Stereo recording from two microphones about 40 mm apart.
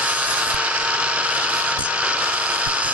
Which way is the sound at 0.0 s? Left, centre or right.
Right.